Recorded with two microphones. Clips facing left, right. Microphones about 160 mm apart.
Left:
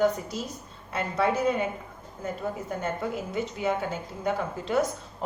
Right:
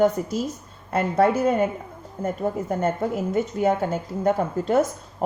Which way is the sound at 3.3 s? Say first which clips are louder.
Right 7 dB; 50° right (ahead or behind).